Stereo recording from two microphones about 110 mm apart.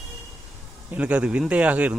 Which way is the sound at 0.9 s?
10° right (ahead or behind).